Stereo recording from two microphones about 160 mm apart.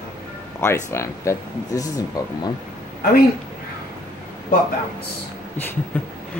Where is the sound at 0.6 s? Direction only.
15° left (ahead or behind).